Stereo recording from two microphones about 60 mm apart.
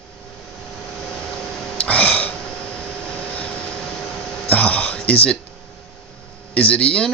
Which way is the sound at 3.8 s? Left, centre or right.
Centre.